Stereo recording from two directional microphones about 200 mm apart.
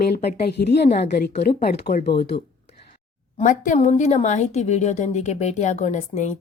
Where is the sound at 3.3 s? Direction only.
40° left (ahead or behind).